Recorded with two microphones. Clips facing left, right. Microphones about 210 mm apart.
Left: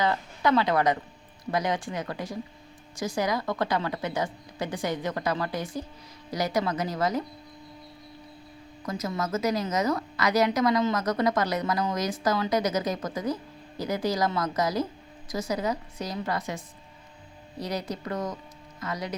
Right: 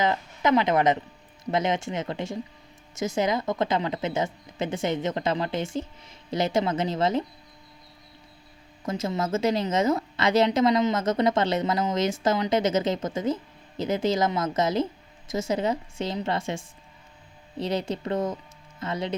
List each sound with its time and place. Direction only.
0.0 s a woman's voice: 20° right (ahead or behind)
8.8 s a woman's voice: 25° right (ahead or behind)